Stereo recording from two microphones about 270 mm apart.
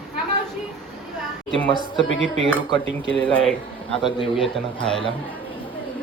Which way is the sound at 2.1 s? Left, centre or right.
Left.